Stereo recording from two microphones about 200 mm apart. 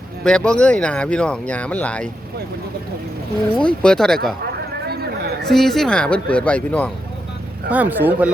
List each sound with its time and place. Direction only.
0.3 s speech: 5° left (ahead or behind)
3.5 s speech: 5° left (ahead or behind)
4.9 s a sound: 50° right (ahead or behind)
5.5 s speech: centre (ahead or behind)
7.7 s speech: 10° right (ahead or behind)